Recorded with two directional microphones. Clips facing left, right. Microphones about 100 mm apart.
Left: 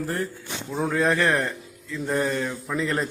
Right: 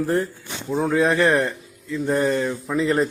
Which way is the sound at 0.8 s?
5° right (ahead or behind).